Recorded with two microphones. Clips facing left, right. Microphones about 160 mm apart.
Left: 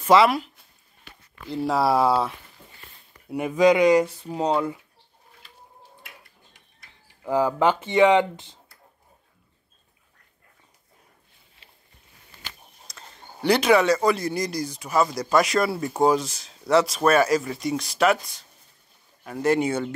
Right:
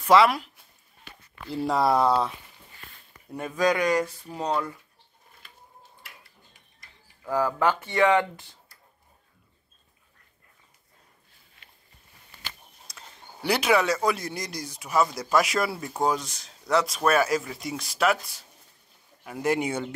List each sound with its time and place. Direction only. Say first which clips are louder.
0.0 s speech: left 2 dB; centre (ahead or behind)
1.5 s speech: left 1 dB; centre (ahead or behind); by 4.7 s 20° left (ahead or behind)
6.0 s a sound: left 2 dB; 65° left (ahead or behind)
7.2 s speech: left 3 dB; 20° left (ahead or behind)
12.8 s speech: left 2 dB; 5° right (ahead or behind)